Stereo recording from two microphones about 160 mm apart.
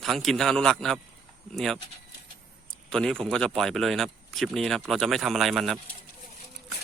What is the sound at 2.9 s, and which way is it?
Speech, 5° left (ahead or behind).